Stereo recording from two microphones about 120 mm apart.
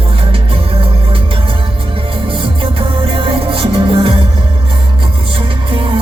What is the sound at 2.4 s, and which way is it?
Music, 45° right (ahead or behind).